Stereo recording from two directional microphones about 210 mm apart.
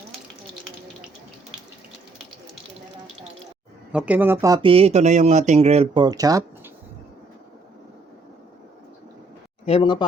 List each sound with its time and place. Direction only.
3.9 s speech: 5° right (ahead or behind)
9.6 s speech: 25° left (ahead or behind)